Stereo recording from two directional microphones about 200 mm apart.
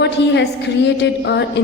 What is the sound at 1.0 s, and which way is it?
Speech, 60° left (ahead or behind).